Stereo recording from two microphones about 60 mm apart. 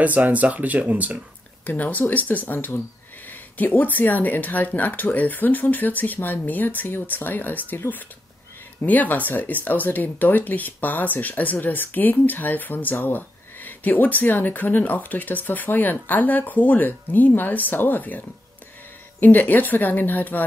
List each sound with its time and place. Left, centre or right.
0.0 s speech: right
1.7 s speech: left